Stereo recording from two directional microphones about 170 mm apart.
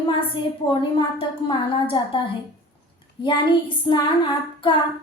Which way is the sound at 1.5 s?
30° left (ahead or behind).